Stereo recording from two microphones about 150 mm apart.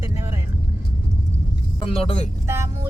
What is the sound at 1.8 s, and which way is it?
Speech, 40° left (ahead or behind).